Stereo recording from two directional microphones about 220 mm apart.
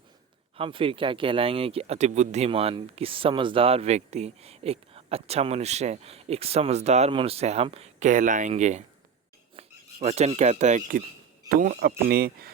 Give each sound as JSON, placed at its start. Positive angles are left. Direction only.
{"t": 0.5, "sound": "a man's voice", "side_deg": -25}